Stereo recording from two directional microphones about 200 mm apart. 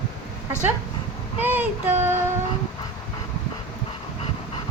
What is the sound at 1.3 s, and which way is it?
Speech, 10° right (ahead or behind).